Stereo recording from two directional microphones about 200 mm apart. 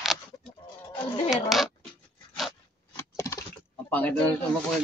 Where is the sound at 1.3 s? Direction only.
Centre (ahead or behind).